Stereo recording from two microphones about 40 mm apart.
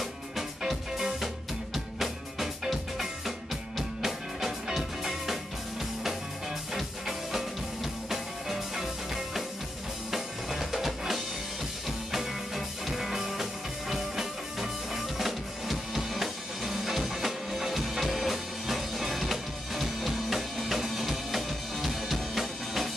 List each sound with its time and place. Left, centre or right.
0.0 s music: centre
10.1 s drum kit: centre
12.1 s music: centre